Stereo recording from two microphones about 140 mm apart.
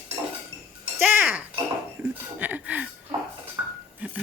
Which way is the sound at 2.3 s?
10° right (ahead or behind).